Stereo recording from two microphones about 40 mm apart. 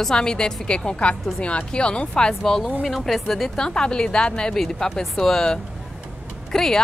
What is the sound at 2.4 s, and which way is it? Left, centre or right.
A woman's voice, centre.